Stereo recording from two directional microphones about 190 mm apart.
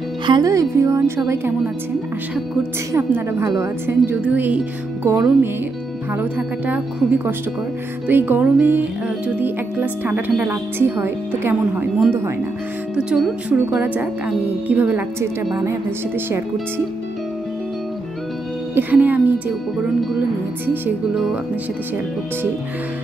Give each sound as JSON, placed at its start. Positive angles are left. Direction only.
{"t": 0.3, "sound": "speech", "side_deg": -20}
{"t": 2.9, "sound": "speech", "side_deg": -15}
{"t": 18.8, "sound": "speech", "side_deg": -10}